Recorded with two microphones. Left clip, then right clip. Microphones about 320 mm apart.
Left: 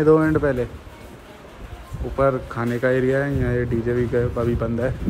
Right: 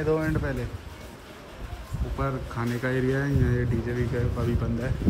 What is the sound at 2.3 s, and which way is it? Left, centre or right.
Speech, centre.